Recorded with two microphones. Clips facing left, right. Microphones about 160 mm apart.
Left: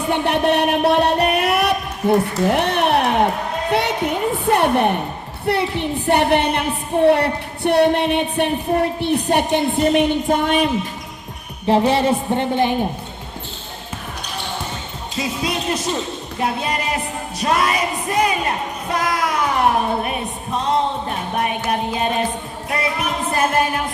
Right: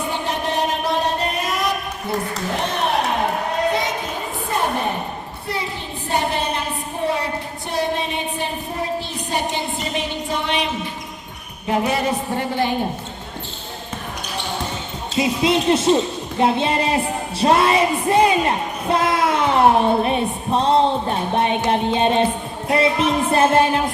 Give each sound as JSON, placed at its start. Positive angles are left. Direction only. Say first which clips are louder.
{"t": 0.1, "sound": "music", "louder": "left 11 dB", "side_deg": 65}
{"t": 2.5, "sound": "a sound", "louder": "left 4 dB", "side_deg": 65}
{"t": 5.5, "sound": "a woman's voice", "louder": "left 9 dB", "side_deg": 65}
{"t": 11.7, "sound": "a woman's voice", "louder": "left 4 dB", "side_deg": 30}
{"t": 15.2, "sound": "speech", "louder": "right 5 dB", "side_deg": -25}
{"t": 16.4, "sound": "music", "louder": "right 5 dB", "side_deg": -25}